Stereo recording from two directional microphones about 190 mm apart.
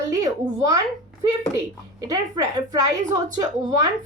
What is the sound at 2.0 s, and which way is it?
Speech, 20° right (ahead or behind).